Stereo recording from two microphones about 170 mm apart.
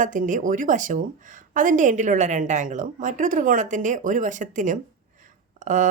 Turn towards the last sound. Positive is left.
turn(degrees=-45)  # may be behind; listen again after turning